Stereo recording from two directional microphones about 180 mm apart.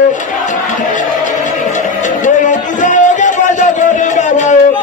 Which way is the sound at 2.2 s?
45° left (ahead or behind).